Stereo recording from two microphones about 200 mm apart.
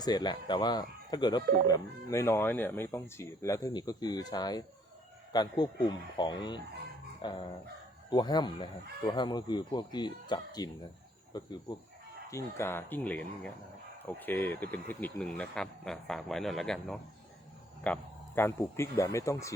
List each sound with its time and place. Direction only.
0.0 s speech: 20° left (ahead or behind)
7.2 s dog: 20° left (ahead or behind)
8.1 s speech: 20° left (ahead or behind)